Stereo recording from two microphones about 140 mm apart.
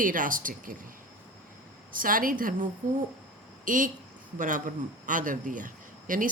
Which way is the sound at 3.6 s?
70° right (ahead or behind).